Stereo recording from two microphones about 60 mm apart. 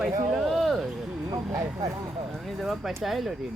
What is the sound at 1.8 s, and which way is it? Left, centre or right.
Speech, right.